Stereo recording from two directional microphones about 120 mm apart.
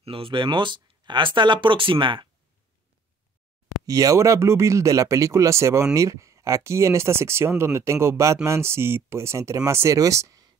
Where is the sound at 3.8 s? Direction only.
30° right (ahead or behind).